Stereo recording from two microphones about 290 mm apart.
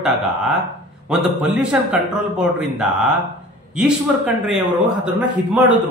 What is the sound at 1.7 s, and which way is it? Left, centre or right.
Speech, centre.